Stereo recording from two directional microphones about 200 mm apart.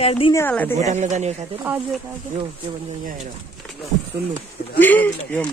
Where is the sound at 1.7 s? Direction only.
5° right (ahead or behind).